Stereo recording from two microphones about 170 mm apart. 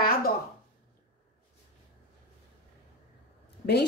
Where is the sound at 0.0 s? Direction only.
60° left (ahead or behind).